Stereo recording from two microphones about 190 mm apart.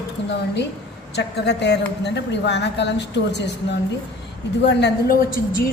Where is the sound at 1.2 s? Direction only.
60° left (ahead or behind).